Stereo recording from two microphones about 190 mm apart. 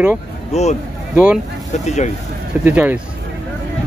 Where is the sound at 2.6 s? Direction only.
10° right (ahead or behind).